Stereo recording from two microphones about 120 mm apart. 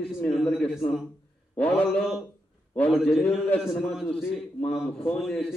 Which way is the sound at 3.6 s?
5° right (ahead or behind).